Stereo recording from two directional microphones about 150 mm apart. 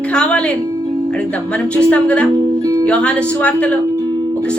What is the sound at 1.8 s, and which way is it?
Speech, 10° left (ahead or behind).